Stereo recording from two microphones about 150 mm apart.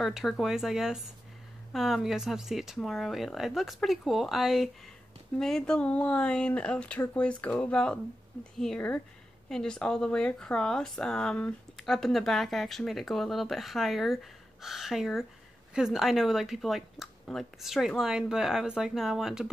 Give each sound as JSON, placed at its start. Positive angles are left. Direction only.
{"t": 0.0, "sound": "speech", "side_deg": 0}